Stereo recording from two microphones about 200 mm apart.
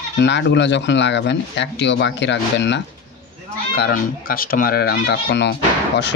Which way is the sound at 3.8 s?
50° left (ahead or behind).